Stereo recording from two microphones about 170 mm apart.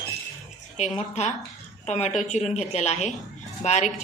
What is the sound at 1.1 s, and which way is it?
A woman's voice, 40° left (ahead or behind).